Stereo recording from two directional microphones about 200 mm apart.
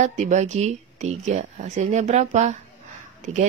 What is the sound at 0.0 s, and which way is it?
A woman's voice, 35° right (ahead or behind).